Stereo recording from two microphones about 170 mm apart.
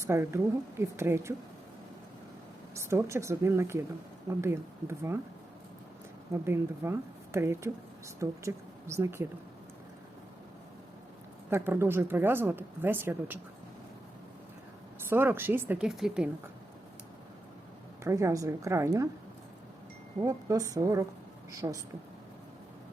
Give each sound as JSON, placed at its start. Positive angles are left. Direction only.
{"t": 0.0, "sound": "speech", "side_deg": -15}
{"t": 2.7, "sound": "speech", "side_deg": -15}
{"t": 6.3, "sound": "speech", "side_deg": -15}
{"t": 11.5, "sound": "speech", "side_deg": -10}
{"t": 15.1, "sound": "speech", "side_deg": -15}
{"t": 18.0, "sound": "speech", "side_deg": -15}
{"t": 20.2, "sound": "a woman's voice", "side_deg": -20}